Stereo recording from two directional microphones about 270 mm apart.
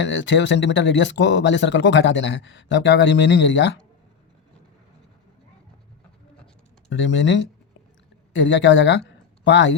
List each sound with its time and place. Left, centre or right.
0.0 s speech: left
6.9 s speech: left